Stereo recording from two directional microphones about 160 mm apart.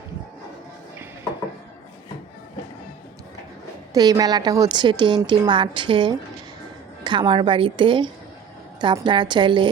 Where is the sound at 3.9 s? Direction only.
20° right (ahead or behind).